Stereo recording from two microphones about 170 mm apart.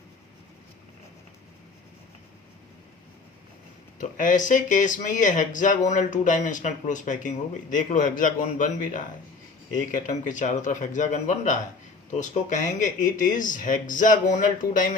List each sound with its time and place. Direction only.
4.0 s speech: 50° left (ahead or behind)